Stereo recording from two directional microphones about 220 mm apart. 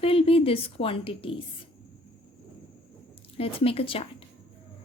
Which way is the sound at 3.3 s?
25° left (ahead or behind).